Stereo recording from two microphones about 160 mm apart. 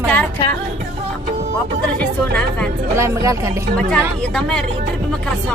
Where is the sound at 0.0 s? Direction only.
10° left (ahead or behind).